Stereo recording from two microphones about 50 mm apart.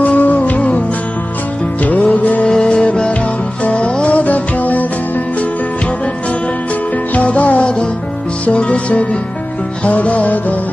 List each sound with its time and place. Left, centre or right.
0.0 s music: left
2.4 s music: centre
7.2 s music: left